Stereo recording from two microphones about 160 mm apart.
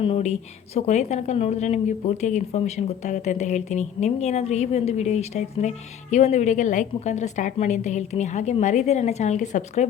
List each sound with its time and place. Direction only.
0.0 s a woman's voice: 40° left (ahead or behind)